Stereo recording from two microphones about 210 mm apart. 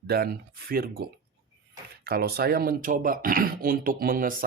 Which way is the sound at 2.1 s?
45° right (ahead or behind).